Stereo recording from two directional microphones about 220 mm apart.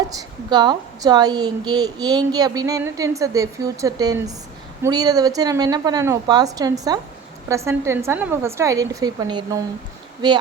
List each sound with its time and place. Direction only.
0.2 s a woman's voice: 20° right (ahead or behind)